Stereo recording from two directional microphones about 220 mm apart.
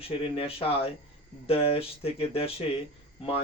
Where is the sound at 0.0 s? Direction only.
25° left (ahead or behind).